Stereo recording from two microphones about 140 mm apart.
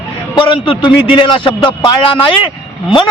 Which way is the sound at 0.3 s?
35° left (ahead or behind).